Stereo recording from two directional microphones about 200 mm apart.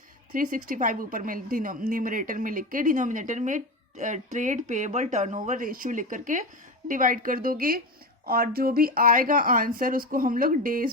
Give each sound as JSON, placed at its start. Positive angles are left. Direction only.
{"t": 0.3, "sound": "a woman's voice", "side_deg": -40}